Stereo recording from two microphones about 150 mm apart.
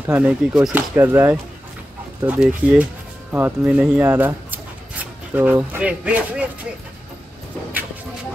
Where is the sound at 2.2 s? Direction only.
5° right (ahead or behind).